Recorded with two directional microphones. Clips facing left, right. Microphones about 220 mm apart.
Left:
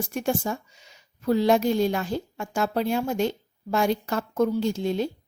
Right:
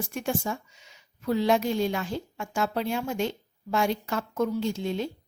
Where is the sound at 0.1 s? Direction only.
40° left (ahead or behind).